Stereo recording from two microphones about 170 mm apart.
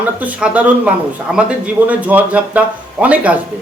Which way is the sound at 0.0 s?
10° right (ahead or behind).